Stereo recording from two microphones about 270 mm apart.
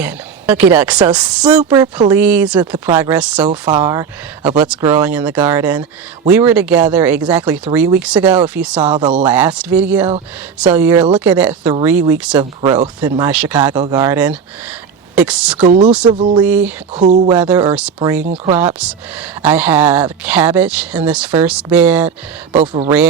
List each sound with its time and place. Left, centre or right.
0.0 s speech: centre
3.4 s speech: centre
12.6 s speech: centre
15.6 s speech: right
16.4 s speech: centre
16.9 s speech: right
17.3 s speech: centre
22.5 s speech: right